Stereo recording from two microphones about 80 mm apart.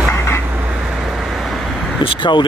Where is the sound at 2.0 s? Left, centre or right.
Left.